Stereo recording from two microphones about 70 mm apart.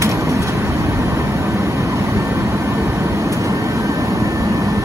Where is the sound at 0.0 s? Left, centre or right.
Right.